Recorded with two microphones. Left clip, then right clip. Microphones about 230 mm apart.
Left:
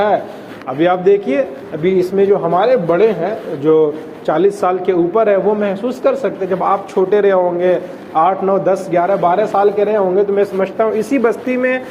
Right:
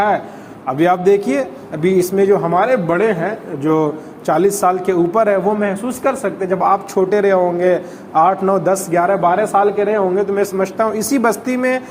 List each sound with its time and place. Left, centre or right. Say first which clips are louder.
0.7 s a man's voice: left 1 dB; right